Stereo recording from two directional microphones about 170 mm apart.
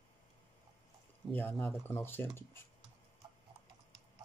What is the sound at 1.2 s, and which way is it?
Speech, centre (ahead or behind).